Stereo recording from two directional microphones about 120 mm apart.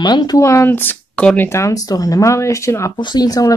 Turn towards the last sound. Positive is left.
turn(degrees=30)  # may be behind; listen again after turning